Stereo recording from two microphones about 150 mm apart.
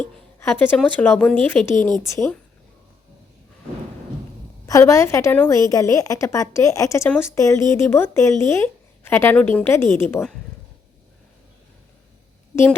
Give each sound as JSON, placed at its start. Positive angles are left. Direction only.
{"t": 0.3, "sound": "a sound", "side_deg": 15}
{"t": 0.8, "sound": "a woman's voice", "side_deg": 10}
{"t": 4.6, "sound": "a woman's voice", "side_deg": 20}